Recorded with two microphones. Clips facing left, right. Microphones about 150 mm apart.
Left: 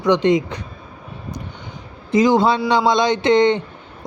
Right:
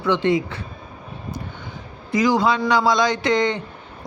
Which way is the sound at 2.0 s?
25° left (ahead or behind).